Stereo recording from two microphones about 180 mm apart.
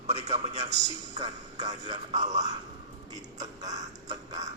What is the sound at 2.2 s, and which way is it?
Speech, 20° right (ahead or behind).